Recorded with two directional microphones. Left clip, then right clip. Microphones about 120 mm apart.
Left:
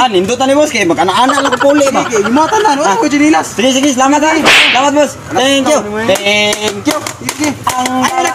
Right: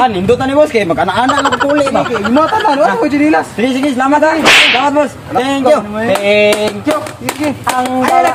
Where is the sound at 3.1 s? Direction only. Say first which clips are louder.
Left 1 dB; 30° right (ahead or behind).